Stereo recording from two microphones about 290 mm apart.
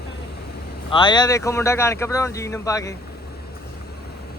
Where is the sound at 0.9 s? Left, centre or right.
Centre.